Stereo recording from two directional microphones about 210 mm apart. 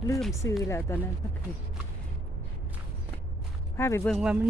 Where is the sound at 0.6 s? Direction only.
15° left (ahead or behind).